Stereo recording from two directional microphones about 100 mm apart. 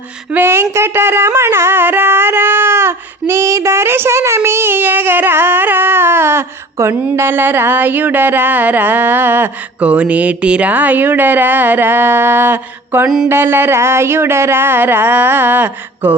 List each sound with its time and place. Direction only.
0.3 s music: 25° right (ahead or behind)